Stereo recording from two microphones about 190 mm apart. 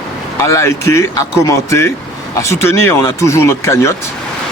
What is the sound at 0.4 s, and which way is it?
Speech, 15° left (ahead or behind).